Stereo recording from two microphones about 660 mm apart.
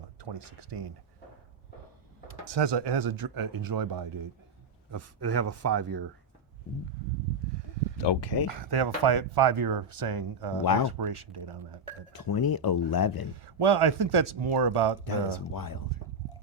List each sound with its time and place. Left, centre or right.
0.2 s speech: right
2.4 s speech: right
8.0 s speech: left
8.7 s speech: right
10.6 s speech: left
11.1 s speech: right
12.1 s speech: left
13.4 s speech: right
15.5 s speech: left